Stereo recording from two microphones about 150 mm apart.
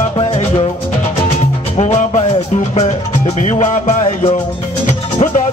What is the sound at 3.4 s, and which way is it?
Music, 50° left (ahead or behind).